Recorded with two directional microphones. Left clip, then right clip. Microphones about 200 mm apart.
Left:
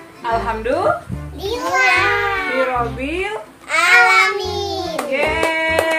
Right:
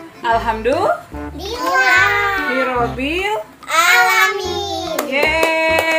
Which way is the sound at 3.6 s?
5° right (ahead or behind).